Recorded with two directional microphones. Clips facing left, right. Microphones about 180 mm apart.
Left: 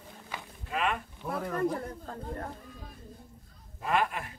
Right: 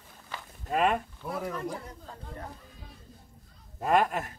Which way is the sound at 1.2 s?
10° right (ahead or behind).